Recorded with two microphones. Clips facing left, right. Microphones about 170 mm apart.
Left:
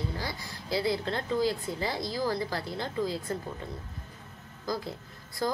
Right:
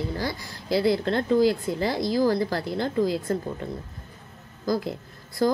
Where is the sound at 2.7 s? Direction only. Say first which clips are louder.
Right 9 dB; 75° right (ahead or behind).